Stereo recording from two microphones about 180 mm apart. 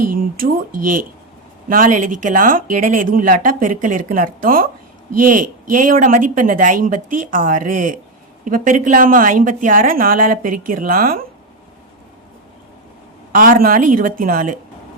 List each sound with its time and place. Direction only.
0.0 s speech: 50° right (ahead or behind)
13.3 s speech: 50° right (ahead or behind)